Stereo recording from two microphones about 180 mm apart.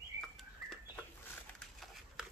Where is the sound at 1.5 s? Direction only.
Centre (ahead or behind).